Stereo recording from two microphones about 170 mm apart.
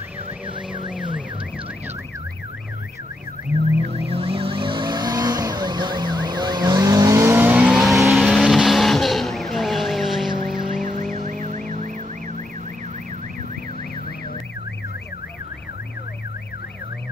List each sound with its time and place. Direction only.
4.1 s vehicle: 35° right (ahead or behind); by 10.3 s centre (ahead or behind)
10.8 s vehicle: 50° right (ahead or behind)
11.2 s music: 45° right (ahead or behind)